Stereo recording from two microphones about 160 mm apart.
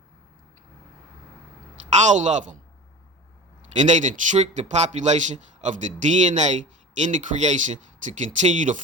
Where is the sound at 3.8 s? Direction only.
50° right (ahead or behind).